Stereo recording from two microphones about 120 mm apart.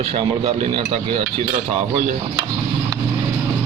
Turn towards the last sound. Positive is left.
turn(degrees=-50)  # may be behind; listen again after turning